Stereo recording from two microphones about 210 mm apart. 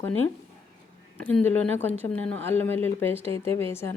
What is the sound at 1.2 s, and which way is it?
A woman's voice, 5° left (ahead or behind).